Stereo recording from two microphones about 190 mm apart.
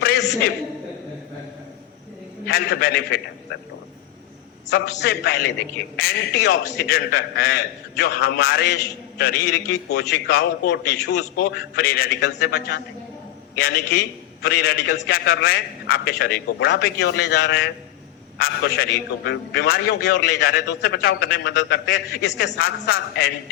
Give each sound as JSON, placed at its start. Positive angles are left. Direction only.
{"t": 0.0, "sound": "a sound", "side_deg": 50}
{"t": 2.5, "sound": "a man's voice", "side_deg": 55}
{"t": 4.7, "sound": "a man's voice", "side_deg": 60}
{"t": 12.0, "sound": "a man's voice", "side_deg": 65}
{"t": 18.3, "sound": "a man's voice", "side_deg": 50}